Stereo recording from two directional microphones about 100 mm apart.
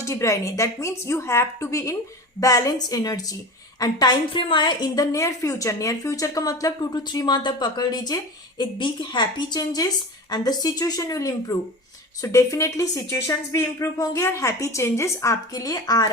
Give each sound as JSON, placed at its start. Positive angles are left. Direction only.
{"t": 0.0, "sound": "a woman's voice", "side_deg": 30}